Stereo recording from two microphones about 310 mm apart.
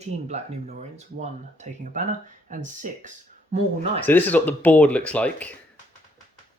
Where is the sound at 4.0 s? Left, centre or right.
Centre.